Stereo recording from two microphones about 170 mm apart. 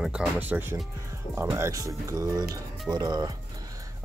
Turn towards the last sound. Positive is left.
turn(degrees=-20)  # may be behind; listen again after turning